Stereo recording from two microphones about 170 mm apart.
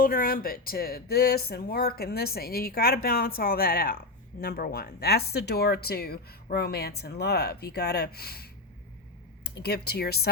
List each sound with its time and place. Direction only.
0.0 s speech: 55° left (ahead or behind)